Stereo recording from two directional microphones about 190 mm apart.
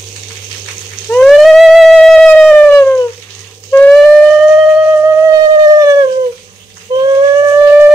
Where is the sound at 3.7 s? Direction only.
5° left (ahead or behind).